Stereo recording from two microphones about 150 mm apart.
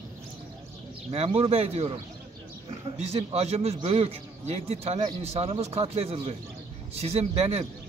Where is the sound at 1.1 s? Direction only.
45° right (ahead or behind).